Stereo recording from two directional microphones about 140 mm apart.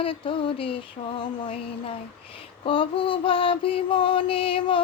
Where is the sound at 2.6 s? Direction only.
40° left (ahead or behind).